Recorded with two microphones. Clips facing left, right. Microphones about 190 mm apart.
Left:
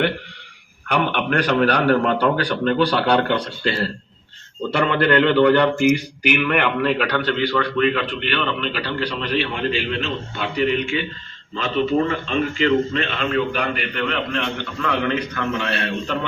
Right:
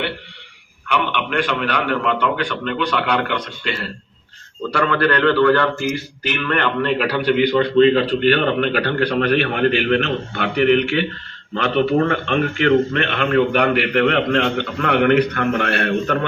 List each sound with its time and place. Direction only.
0.9 s a man's voice: 40° left (ahead or behind)
4.7 s speech: 20° left (ahead or behind); by 16.2 s 55° right (ahead or behind)